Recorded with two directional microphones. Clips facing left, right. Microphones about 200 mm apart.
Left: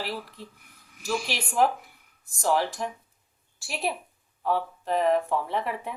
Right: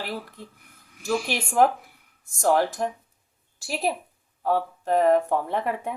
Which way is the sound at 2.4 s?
50° right (ahead or behind).